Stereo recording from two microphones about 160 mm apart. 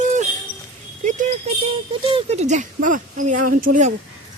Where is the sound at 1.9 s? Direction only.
35° right (ahead or behind); by 3.9 s 50° right (ahead or behind).